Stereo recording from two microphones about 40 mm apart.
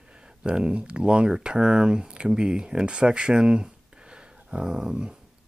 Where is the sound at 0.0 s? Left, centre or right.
Right.